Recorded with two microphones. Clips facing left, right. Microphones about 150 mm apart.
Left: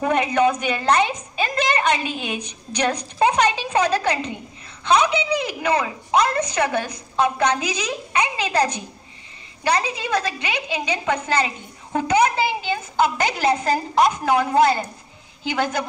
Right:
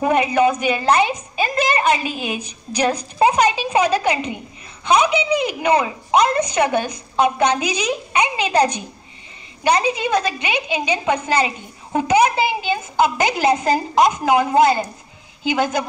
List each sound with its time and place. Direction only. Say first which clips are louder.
0.0 s a woman's voice: right 2 dB; 5° right (ahead or behind)